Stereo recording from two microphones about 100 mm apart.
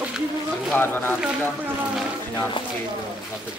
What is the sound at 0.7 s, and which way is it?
Speech, 20° left (ahead or behind).